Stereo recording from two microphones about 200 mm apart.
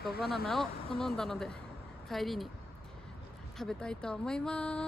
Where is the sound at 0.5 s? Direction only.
Centre (ahead or behind).